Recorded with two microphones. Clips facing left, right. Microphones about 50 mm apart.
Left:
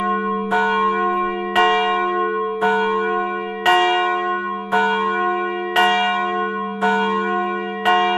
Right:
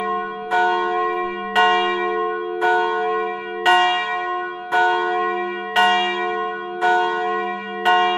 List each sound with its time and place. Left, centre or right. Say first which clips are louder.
0.5 s church bell: even; left